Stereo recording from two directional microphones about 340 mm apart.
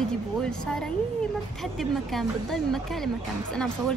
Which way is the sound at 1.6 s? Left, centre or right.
Centre.